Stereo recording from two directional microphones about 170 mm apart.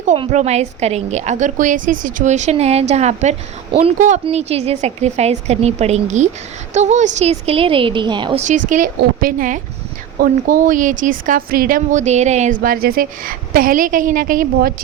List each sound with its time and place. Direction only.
0.2 s speech: 40° right (ahead or behind)
8.4 s speech: 45° right (ahead or behind)